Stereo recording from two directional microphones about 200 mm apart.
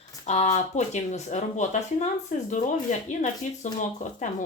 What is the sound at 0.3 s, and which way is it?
Speech, 35° left (ahead or behind).